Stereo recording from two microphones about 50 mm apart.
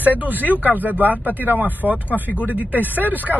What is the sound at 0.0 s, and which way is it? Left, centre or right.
Speech, right.